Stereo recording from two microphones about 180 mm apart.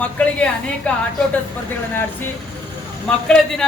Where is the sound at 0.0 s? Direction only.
5° left (ahead or behind).